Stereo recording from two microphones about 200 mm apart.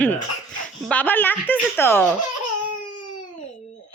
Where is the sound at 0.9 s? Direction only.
10° left (ahead or behind).